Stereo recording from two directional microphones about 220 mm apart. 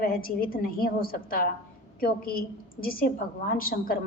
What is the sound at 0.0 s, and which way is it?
A woman's voice, 40° left (ahead or behind).